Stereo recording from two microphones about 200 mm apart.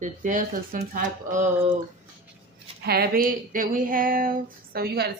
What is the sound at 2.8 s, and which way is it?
Speech, 50° right (ahead or behind).